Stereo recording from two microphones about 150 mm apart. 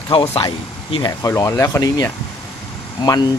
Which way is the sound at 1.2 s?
20° left (ahead or behind).